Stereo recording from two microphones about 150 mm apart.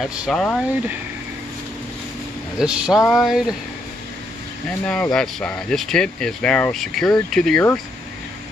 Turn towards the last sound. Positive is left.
turn(degrees=5)  # may be behind; listen again after turning